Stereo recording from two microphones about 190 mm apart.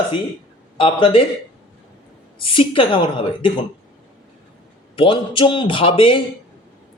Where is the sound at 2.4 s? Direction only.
25° left (ahead or behind).